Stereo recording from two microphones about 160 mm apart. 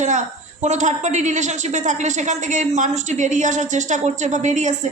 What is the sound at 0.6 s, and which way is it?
A woman's voice, 45° right (ahead or behind).